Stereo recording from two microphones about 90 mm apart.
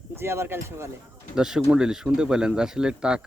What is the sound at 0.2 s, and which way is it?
Speech, 30° right (ahead or behind).